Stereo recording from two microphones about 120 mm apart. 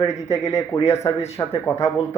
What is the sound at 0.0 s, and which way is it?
Speech, 30° left (ahead or behind).